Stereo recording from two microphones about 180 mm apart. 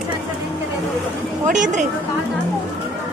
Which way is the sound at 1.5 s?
45° right (ahead or behind).